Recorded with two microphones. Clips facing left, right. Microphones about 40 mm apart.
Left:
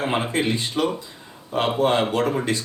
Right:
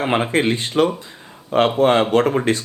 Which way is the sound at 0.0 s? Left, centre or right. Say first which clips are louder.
Right 5 dB; right.